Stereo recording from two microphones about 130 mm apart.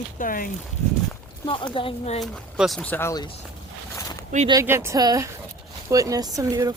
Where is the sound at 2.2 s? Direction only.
Centre (ahead or behind).